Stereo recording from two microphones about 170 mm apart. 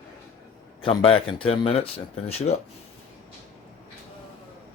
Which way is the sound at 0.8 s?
30° left (ahead or behind).